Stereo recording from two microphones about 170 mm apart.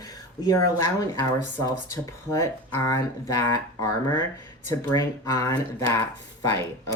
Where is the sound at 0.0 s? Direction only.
20° left (ahead or behind).